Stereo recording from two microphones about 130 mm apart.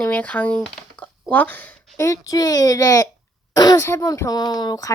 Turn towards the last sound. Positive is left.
turn(degrees=30)  # may be behind; listen again after turning